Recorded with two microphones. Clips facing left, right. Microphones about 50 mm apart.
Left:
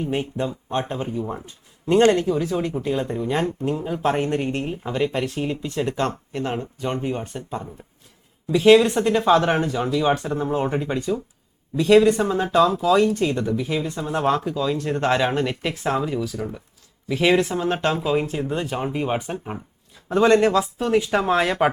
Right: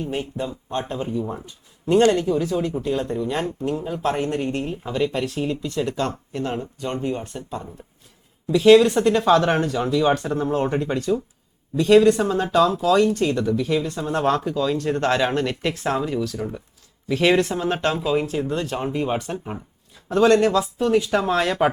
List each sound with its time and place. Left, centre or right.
0.0 s speech: centre
2.2 s speech: centre
8.7 s speech: centre
17.9 s speech: centre
20.1 s speech: left